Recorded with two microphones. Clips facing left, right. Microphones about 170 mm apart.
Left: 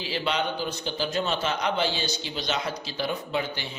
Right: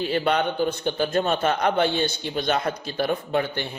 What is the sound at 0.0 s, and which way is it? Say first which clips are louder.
A man's voice: right 6 dB; 55° right (ahead or behind).